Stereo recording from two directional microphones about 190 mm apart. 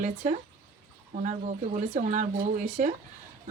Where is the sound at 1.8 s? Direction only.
40° right (ahead or behind).